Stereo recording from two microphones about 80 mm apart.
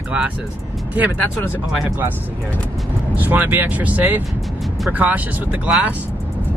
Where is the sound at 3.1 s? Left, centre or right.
Right.